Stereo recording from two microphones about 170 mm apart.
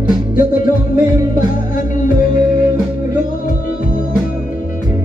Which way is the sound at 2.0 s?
50° left (ahead or behind).